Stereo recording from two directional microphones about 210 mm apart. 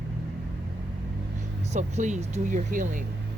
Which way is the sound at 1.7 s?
35° right (ahead or behind).